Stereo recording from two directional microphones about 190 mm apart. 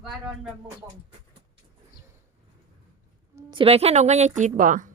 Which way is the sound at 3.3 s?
25° right (ahead or behind).